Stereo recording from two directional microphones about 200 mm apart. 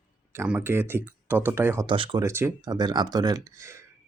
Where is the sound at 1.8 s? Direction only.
25° right (ahead or behind).